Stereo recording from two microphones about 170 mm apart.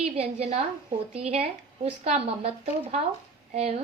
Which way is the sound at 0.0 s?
35° right (ahead or behind).